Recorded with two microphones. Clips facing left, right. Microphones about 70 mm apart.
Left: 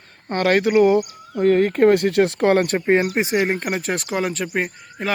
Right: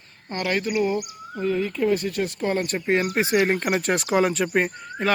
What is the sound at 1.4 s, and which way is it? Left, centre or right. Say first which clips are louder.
Speech: left 8 dB; left.